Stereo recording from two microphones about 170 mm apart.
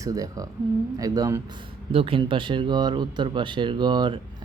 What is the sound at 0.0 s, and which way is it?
Speech, 20° right (ahead or behind).